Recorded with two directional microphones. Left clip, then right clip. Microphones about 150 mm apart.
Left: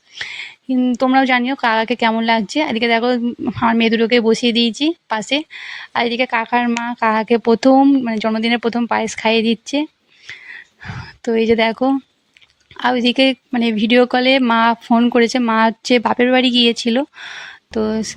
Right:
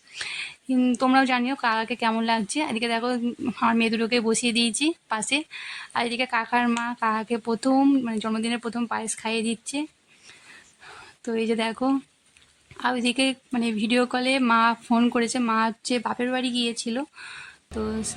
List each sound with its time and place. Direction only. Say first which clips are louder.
0.2 s a sound: left 5 dB; 25° left (ahead or behind)
0.8 s speech: left 6 dB; 15° left (ahead or behind)
6.8 s speech: left 9 dB; 35° left (ahead or behind)
11.0 s speech: left 11 dB; 35° left (ahead or behind)